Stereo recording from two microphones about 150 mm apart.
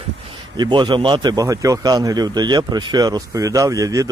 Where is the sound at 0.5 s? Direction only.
30° right (ahead or behind).